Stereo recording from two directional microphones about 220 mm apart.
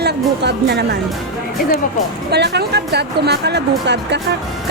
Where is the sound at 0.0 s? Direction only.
50° right (ahead or behind).